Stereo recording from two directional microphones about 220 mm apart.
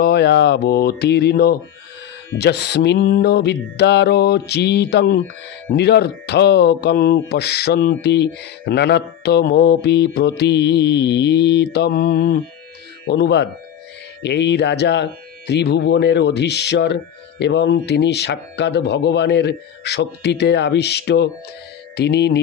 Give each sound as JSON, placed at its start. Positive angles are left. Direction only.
{"t": 0.0, "sound": "speech", "side_deg": 50}